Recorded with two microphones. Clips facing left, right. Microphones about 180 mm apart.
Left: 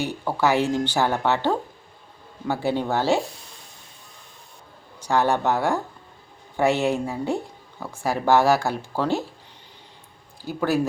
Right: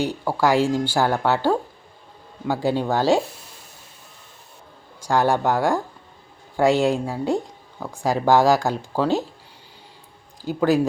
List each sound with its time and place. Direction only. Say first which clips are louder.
0.0 s speech: right 2 dB; 10° right (ahead or behind)
4.9 s speech: right 2 dB; 10° right (ahead or behind)
10.4 s speech: right 4 dB; 15° right (ahead or behind)